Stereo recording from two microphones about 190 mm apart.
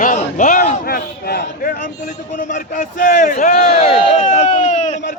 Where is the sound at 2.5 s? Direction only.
40° left (ahead or behind).